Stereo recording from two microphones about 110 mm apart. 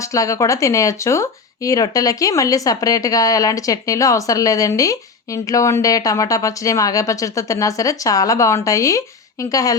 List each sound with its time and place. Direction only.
0.0 s speech: 30° left (ahead or behind)